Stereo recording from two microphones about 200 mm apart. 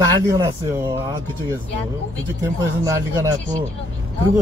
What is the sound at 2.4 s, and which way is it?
Speech, 15° right (ahead or behind).